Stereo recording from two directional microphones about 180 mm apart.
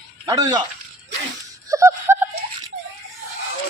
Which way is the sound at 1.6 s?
15° right (ahead or behind).